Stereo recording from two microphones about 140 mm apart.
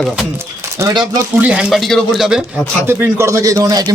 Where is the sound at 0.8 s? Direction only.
30° right (ahead or behind).